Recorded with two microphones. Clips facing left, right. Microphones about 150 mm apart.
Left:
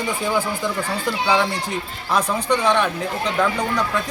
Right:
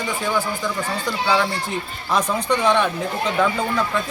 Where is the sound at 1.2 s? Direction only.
15° left (ahead or behind).